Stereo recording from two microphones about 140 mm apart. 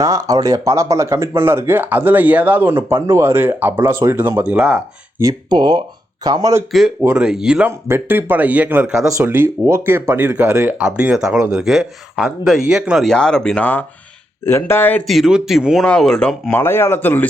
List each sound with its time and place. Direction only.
0.0 s speech: 25° right (ahead or behind); by 4.8 s 5° right (ahead or behind)
5.2 s speech: 30° right (ahead or behind)
7.0 s speech: 10° right (ahead or behind)
7.9 s speech: 15° right (ahead or behind); by 15.0 s 15° left (ahead or behind)
15.0 s speech: centre (ahead or behind); by 17.2 s 15° left (ahead or behind)